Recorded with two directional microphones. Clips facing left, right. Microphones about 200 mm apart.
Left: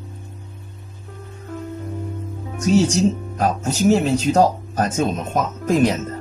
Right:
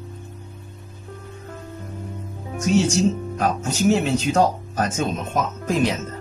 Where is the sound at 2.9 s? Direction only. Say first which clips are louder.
Left 1 dB; 40° left (ahead or behind).